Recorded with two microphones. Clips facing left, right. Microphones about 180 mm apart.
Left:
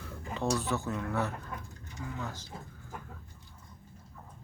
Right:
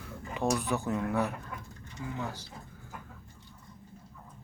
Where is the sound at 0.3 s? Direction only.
15° right (ahead or behind).